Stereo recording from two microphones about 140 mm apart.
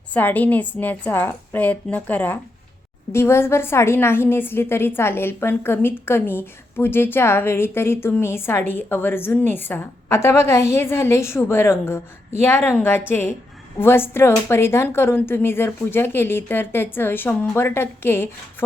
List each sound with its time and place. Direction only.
0.1 s a woman's voice: 10° left (ahead or behind)